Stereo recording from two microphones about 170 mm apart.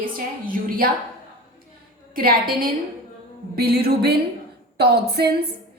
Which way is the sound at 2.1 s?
60° right (ahead or behind).